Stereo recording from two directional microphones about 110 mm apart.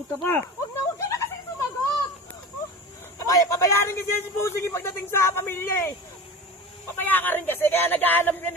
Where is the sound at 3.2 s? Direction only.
30° left (ahead or behind).